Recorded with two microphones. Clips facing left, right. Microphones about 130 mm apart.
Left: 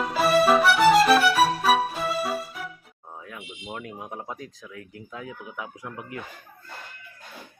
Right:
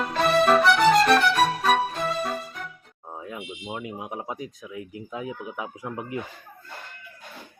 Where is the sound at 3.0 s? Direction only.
25° right (ahead or behind).